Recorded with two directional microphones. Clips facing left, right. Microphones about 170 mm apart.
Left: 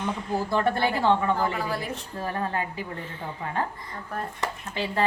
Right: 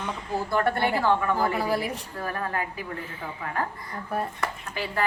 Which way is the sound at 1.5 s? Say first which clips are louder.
Right 4 dB; 10° right (ahead or behind).